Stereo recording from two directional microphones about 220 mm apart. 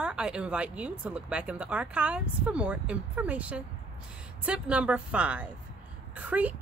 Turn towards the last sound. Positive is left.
turn(degrees=-5)  # may be behind; listen again after turning